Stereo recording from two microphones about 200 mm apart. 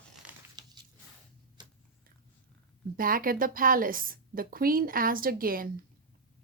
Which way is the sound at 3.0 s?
45° right (ahead or behind).